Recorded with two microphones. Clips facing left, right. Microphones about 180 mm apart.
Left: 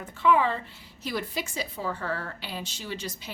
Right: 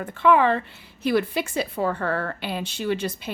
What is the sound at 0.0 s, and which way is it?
A woman's voice, 60° right (ahead or behind).